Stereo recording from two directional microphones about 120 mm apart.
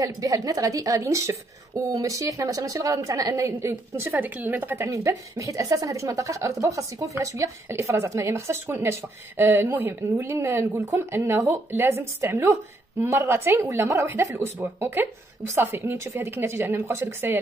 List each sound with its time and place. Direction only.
0.0 s a woman's voice: 30° right (ahead or behind)